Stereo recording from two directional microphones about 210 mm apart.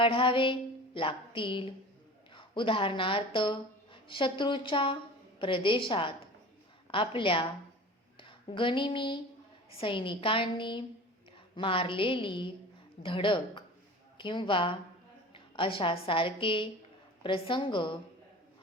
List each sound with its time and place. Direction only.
0.0 s a woman's voice: 25° left (ahead or behind)